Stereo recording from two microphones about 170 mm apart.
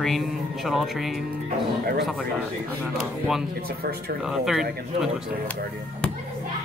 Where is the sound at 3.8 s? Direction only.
65° right (ahead or behind).